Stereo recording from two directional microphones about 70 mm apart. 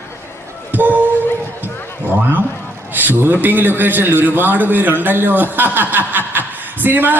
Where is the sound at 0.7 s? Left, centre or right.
Right.